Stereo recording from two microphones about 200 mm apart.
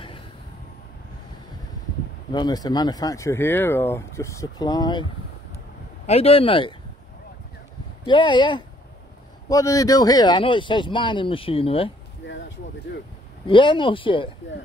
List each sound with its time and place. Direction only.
2.3 s speech: 20° left (ahead or behind)
6.0 s speech: 30° left (ahead or behind)
8.0 s speech: 25° left (ahead or behind)
13.5 s speech: 25° left (ahead or behind)